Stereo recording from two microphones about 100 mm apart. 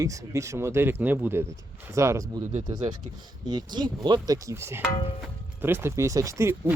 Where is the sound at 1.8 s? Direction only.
30° right (ahead or behind).